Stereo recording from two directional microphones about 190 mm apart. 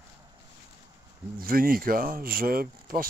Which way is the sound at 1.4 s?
50° right (ahead or behind).